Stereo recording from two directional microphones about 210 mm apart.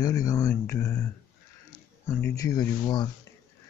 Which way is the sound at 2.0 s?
10° left (ahead or behind).